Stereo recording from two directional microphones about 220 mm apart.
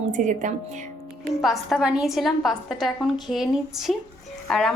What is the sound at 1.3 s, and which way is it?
A woman's voice, centre (ahead or behind).